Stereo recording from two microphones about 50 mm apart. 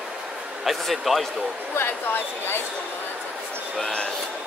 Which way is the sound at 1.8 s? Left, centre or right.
Left.